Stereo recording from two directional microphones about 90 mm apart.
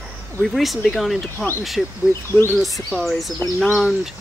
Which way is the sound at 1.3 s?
25° left (ahead or behind).